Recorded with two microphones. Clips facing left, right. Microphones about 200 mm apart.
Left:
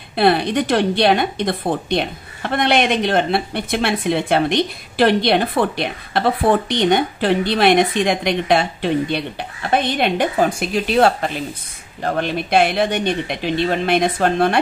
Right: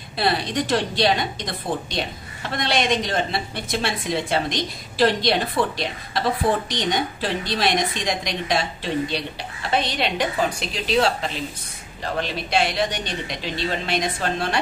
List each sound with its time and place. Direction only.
0.1 s a woman's voice: 60° left (ahead or behind)